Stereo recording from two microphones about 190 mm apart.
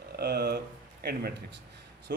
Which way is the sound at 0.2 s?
60° right (ahead or behind).